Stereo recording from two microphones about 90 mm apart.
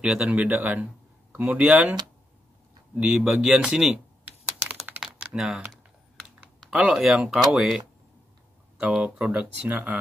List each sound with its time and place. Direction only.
0.0 s speech: 10° right (ahead or behind)
3.0 s speech: 5° right (ahead or behind)
4.2 s computer keyboard: 25° right (ahead or behind)
5.0 s typing: 5° right (ahead or behind)
6.6 s speech: 5° right (ahead or behind)